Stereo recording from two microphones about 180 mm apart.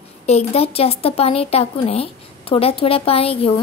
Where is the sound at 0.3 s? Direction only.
35° left (ahead or behind).